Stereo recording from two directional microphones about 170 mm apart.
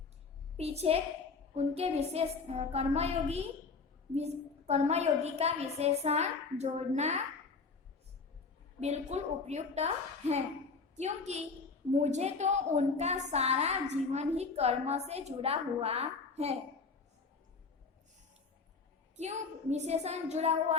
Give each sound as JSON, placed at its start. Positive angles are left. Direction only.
{"t": 0.5, "sound": "a woman's voice", "side_deg": -40}
{"t": 8.8, "sound": "a woman's voice", "side_deg": -40}
{"t": 19.1, "sound": "a woman's voice", "side_deg": -40}